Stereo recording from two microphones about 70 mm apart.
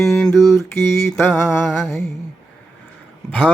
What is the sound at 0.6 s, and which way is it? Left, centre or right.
Mantra, left.